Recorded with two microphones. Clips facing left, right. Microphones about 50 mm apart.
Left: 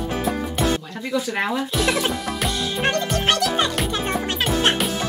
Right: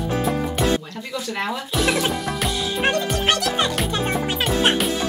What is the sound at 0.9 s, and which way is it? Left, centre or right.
Speech, centre.